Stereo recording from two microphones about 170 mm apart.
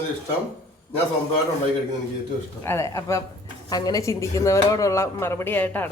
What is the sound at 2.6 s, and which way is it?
A woman's voice, 15° left (ahead or behind).